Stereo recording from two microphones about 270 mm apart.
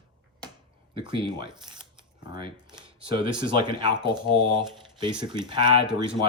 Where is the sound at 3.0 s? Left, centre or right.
Centre.